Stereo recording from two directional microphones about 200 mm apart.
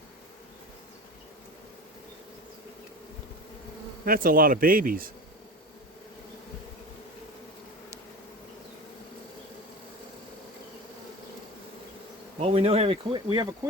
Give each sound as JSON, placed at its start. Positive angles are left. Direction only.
{"t": 4.0, "sound": "speech", "side_deg": -45}
{"t": 12.4, "sound": "speech", "side_deg": -30}